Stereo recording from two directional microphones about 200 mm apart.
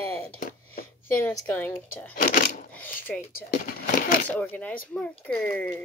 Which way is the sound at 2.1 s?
40° left (ahead or behind).